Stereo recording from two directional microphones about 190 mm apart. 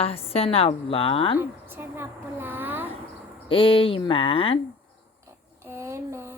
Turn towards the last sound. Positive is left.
turn(degrees=-15)  # may be behind; listen again after turning